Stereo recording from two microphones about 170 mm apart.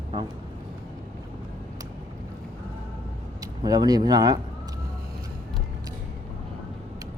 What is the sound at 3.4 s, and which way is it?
Speech, 20° right (ahead or behind).